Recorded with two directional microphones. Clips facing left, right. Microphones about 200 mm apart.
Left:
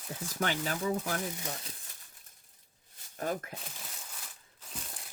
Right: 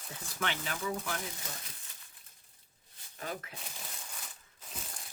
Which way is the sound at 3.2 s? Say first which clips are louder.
Left 6 dB; 45° left (ahead or behind).